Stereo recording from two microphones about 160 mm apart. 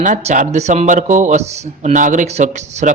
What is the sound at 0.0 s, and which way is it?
A man's voice, 50° right (ahead or behind).